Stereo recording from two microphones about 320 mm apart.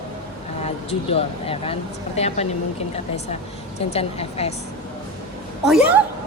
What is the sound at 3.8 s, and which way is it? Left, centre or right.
Speech, centre.